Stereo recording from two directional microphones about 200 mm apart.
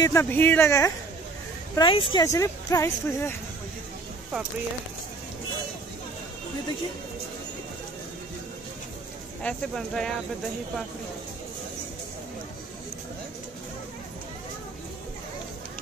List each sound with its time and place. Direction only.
0.0 s speech: 15° left (ahead or behind)
9.4 s speech: 5° left (ahead or behind)